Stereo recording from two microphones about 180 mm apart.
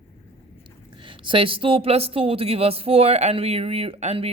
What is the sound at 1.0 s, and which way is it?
A woman's voice, 30° right (ahead or behind).